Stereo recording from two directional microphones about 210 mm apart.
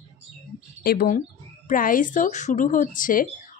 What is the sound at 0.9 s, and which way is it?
Speech, 40° left (ahead or behind).